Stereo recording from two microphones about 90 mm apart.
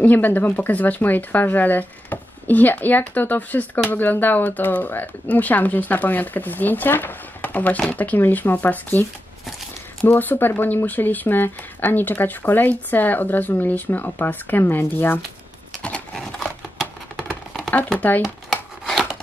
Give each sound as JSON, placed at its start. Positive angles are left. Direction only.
{"t": 0.0, "sound": "speech", "side_deg": 20}
{"t": 10.0, "sound": "speech", "side_deg": 20}
{"t": 15.8, "sound": "horse", "side_deg": 10}
{"t": 17.6, "sound": "speech", "side_deg": 15}